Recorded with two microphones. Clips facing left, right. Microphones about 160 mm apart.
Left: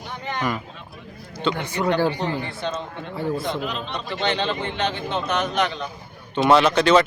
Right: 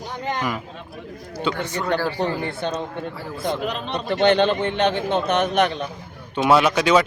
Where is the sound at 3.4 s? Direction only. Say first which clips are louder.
Right 2 dB; 60° right (ahead or behind).